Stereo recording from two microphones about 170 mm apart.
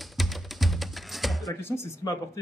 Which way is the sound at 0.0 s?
Centre (ahead or behind).